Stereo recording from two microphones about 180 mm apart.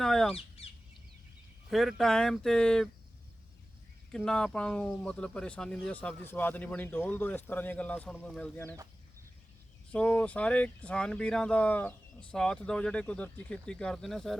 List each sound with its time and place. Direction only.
0.0 s bird: centre (ahead or behind)
0.6 s chicken: 35° left (ahead or behind)
1.7 s speech: centre (ahead or behind)
4.1 s speech: 5° left (ahead or behind)
8.6 s speech: 20° right (ahead or behind)
9.9 s speech: 5° left (ahead or behind)